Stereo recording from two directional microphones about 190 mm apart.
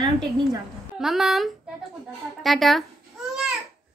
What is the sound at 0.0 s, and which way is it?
Speech, 20° right (ahead or behind).